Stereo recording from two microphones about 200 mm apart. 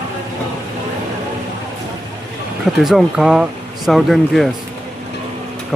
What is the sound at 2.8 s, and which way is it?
Speech, centre (ahead or behind).